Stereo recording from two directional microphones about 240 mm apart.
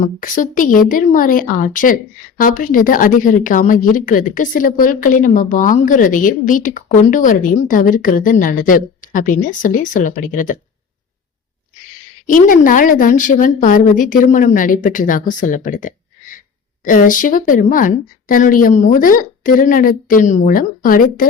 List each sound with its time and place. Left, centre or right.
0.0 s speech: left
12.2 s speech: left